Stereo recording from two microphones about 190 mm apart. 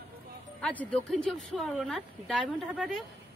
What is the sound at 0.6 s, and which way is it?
Speech, 5° left (ahead or behind).